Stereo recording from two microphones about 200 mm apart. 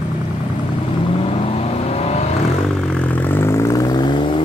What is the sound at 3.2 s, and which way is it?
Vehicle, 10° left (ahead or behind).